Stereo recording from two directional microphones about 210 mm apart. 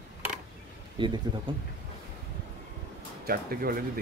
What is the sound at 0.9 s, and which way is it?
Speech, 20° right (ahead or behind).